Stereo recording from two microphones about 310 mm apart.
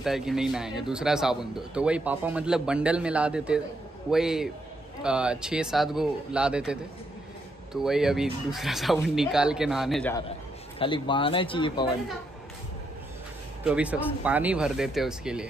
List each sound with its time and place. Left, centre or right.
0.0 s speech: centre
10.8 s speech: centre
13.7 s speech: centre